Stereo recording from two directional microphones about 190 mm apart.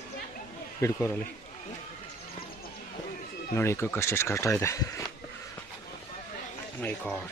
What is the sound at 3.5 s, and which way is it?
Speech, 15° left (ahead or behind).